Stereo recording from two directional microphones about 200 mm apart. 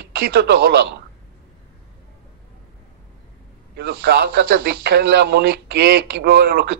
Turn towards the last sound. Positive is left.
turn(degrees=-60)  # may be behind; listen again after turning